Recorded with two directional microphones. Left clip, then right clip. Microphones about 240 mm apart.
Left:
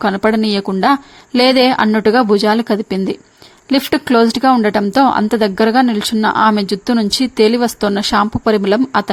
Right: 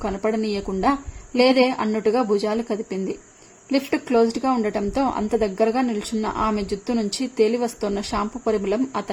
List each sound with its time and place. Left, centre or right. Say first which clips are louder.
0.0 s speech: left 9 dB; left